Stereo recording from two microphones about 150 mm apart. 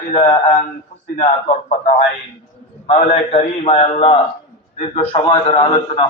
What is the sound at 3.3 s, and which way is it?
A man's voice, 50° left (ahead or behind).